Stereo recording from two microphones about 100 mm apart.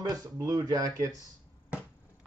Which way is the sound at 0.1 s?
35° right (ahead or behind).